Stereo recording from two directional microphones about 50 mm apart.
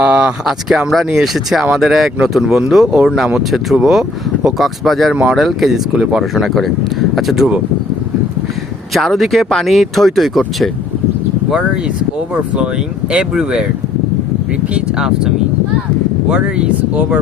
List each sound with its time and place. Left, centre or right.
0.0 s speech: right
0.9 s speech: centre
6.0 s speech: centre
6.3 s speech: centre
8.9 s speech: centre
13.3 s speech: centre
14.9 s speech: centre
16.3 s speech: right